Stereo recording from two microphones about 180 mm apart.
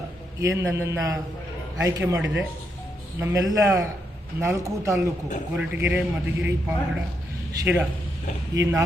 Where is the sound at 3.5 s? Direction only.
15° right (ahead or behind).